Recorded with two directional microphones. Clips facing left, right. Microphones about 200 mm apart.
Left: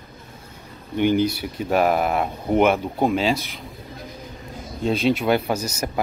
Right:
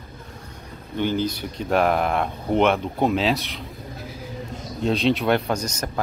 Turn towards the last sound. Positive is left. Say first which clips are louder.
# left 1 dB
turn(degrees=5)  # may be behind; listen again after turning